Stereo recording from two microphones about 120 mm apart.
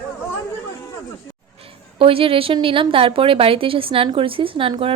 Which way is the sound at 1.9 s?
50° right (ahead or behind).